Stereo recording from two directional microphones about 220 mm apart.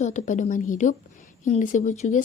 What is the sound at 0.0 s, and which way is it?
A woman's voice, 35° left (ahead or behind).